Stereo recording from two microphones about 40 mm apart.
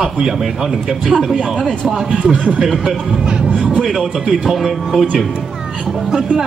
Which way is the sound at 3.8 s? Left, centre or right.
Centre.